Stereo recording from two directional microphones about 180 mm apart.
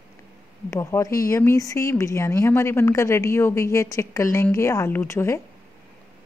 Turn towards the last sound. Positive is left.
turn(degrees=15)  # may be behind; listen again after turning